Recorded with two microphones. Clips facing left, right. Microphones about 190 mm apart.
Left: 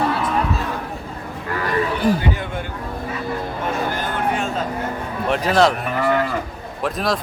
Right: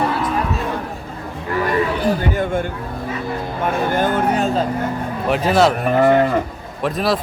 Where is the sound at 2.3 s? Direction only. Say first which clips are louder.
Right 7 dB; 50° right (ahead or behind).